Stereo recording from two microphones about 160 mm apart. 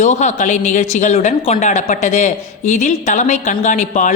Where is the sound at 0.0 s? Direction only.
45° left (ahead or behind).